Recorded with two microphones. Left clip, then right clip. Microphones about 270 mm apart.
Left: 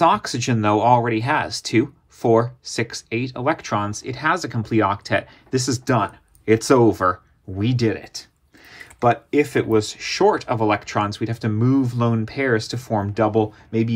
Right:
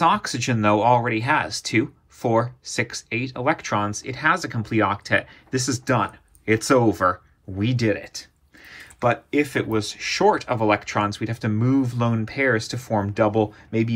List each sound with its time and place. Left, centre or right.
0.0 s speech: left